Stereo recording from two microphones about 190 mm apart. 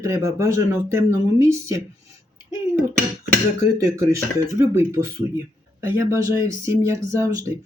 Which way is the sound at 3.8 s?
15° right (ahead or behind).